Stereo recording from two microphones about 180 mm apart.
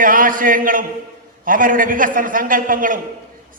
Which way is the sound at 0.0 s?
50° right (ahead or behind).